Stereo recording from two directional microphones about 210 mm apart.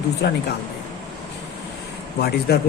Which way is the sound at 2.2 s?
50° left (ahead or behind).